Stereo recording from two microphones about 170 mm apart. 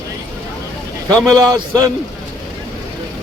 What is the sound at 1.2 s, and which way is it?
Speech, 20° right (ahead or behind).